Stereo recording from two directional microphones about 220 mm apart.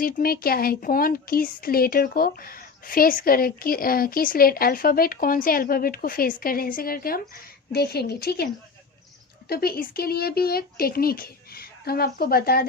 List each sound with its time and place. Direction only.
0.0 s speech: 40° left (ahead or behind)
9.5 s speech: 45° left (ahead or behind)